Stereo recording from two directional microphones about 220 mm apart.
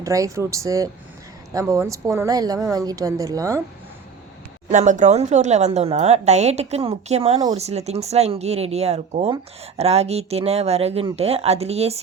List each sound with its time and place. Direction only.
0.0 s a woman's voice: 15° right (ahead or behind)
4.7 s speech: 35° right (ahead or behind)